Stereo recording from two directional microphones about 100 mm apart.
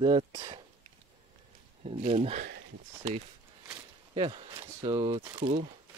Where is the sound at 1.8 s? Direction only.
90° right.